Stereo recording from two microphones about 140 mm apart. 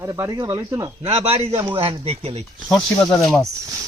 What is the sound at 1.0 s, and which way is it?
Speech, 45° right (ahead or behind).